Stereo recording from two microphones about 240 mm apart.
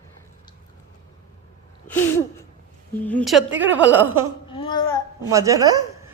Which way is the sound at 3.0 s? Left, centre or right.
Centre.